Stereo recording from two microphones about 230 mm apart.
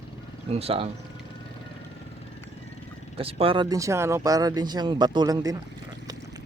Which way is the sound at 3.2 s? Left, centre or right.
Right.